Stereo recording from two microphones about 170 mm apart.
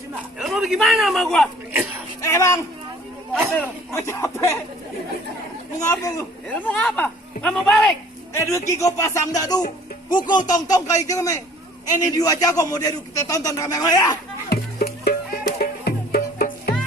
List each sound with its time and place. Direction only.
0.3 s a man's voice: centre (ahead or behind)
2.2 s speech: 15° left (ahead or behind)
5.8 s speech: 20° left (ahead or behind)
8.3 s a man's voice: 15° left (ahead or behind)
14.5 s music: 65° left (ahead or behind)